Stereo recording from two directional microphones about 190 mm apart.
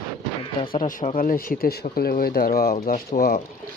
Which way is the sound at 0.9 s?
45° left (ahead or behind).